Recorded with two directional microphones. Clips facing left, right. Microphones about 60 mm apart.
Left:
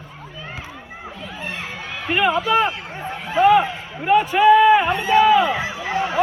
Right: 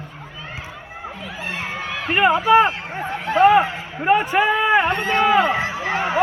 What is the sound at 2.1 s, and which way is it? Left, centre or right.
Speech, right.